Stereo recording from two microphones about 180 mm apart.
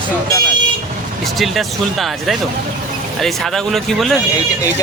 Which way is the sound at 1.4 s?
Centre (ahead or behind).